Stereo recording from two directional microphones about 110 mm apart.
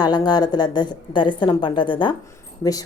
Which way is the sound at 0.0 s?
40° left (ahead or behind).